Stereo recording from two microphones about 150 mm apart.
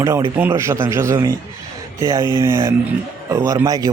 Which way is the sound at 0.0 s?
20° right (ahead or behind).